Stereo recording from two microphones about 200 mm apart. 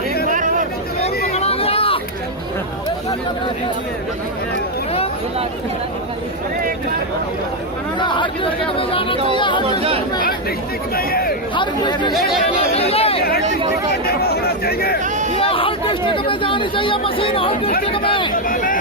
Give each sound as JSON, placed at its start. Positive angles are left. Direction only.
{"t": 0.3, "sound": "a sound", "side_deg": -40}
{"t": 1.3, "sound": "hubbub", "side_deg": 30}
{"t": 7.9, "sound": "speech", "side_deg": 25}
{"t": 10.9, "sound": "speech", "side_deg": 50}
{"t": 11.5, "sound": "speech", "side_deg": 25}
{"t": 13.4, "sound": "speech", "side_deg": -35}
{"t": 14.2, "sound": "speech", "side_deg": 50}
{"t": 15.4, "sound": "speech", "side_deg": 25}
{"t": 18.4, "sound": "speech", "side_deg": 45}